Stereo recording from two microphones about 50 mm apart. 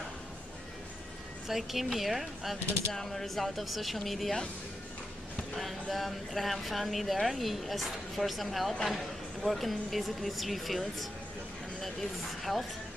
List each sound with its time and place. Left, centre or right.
1.5 s speech: centre
5.6 s speech: centre